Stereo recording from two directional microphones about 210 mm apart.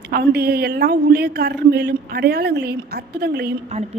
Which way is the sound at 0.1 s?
50° right (ahead or behind).